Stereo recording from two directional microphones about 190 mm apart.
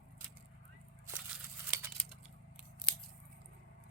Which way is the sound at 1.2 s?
5° right (ahead or behind).